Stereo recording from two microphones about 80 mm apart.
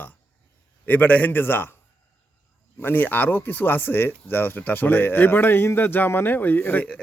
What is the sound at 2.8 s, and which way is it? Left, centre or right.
Speech, left.